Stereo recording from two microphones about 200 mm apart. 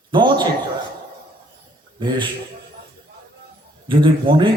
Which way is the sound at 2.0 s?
25° right (ahead or behind).